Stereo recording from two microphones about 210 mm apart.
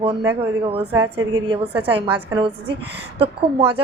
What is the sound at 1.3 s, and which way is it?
Speech, 20° right (ahead or behind).